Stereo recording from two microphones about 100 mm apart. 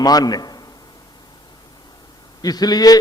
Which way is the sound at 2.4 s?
40° left (ahead or behind).